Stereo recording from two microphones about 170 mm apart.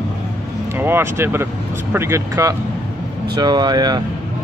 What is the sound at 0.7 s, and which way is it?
Speech, 15° right (ahead or behind).